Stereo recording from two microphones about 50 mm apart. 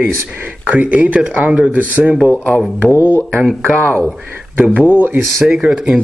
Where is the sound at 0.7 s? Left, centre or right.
Right.